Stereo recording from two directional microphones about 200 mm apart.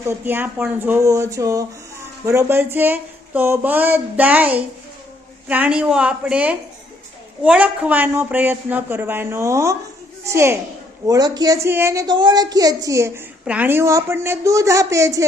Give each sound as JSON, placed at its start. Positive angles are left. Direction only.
{"t": 0.0, "sound": "a woman's voice", "side_deg": -10}